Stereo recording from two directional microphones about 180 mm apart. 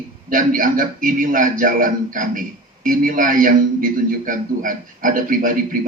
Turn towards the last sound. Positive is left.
turn(degrees=-50)  # may be behind; listen again after turning